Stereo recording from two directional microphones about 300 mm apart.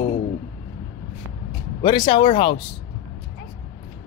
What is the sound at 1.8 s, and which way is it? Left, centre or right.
Speech, centre.